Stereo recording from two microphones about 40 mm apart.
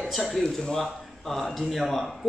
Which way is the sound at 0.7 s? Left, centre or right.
Centre.